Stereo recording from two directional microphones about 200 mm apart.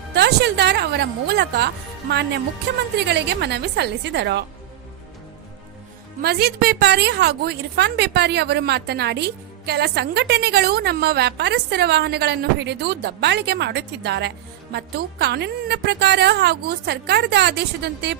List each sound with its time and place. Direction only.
0.1 s a woman's voice: 55° right (ahead or behind)
6.2 s a woman's voice: 50° right (ahead or behind)